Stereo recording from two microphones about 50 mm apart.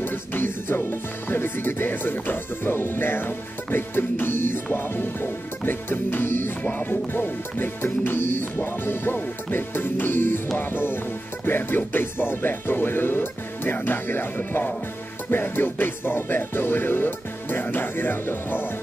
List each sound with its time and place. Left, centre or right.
0.0 s music: left
1.3 s speech: left
5.7 s music: left
6.6 s speech: left
11.4 s music: left